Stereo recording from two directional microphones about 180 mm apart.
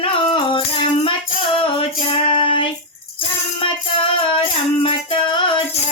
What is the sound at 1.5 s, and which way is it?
Female singing, 30° left (ahead or behind).